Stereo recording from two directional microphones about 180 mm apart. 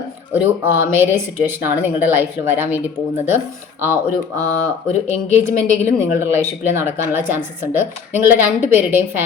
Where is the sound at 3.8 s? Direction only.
15° right (ahead or behind).